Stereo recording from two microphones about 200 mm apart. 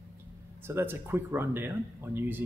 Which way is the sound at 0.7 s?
10° right (ahead or behind).